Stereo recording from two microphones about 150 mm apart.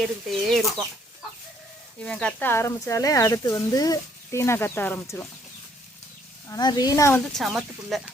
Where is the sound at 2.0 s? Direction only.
5° left (ahead or behind).